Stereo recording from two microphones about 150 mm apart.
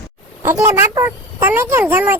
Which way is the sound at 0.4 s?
15° right (ahead or behind).